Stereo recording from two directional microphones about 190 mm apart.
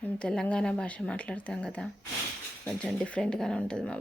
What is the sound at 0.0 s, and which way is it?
A woman's voice, 5° left (ahead or behind).